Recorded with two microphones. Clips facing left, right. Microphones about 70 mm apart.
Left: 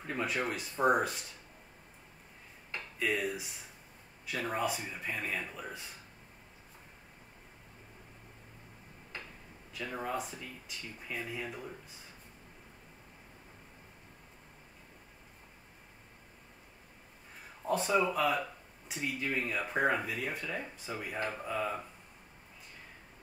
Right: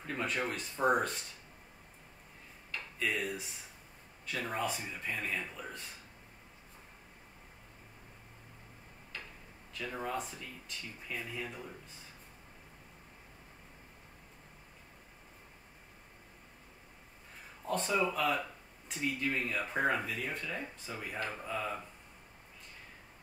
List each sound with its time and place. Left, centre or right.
0.0 s speech: centre
3.0 s speech: centre
9.1 s a sound: left
9.8 s speech: centre
17.6 s speech: centre